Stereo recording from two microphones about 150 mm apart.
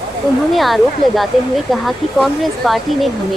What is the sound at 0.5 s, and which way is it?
Speech, centre (ahead or behind).